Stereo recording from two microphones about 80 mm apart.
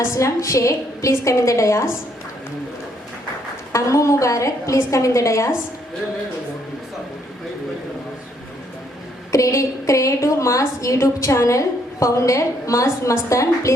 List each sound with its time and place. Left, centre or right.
0.0 s a woman's voice: left
3.7 s a woman's voice: left
9.3 s a woman's voice: left